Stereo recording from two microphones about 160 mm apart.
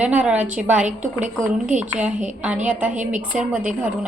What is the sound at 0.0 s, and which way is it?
A woman's voice, 10° right (ahead or behind).